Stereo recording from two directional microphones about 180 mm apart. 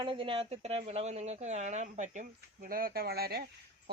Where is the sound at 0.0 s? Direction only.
30° right (ahead or behind).